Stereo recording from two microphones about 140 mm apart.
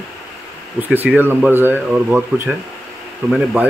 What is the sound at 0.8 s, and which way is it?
Speech, 15° right (ahead or behind).